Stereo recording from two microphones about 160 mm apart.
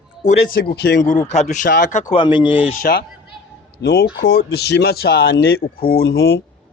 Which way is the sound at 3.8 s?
90° left.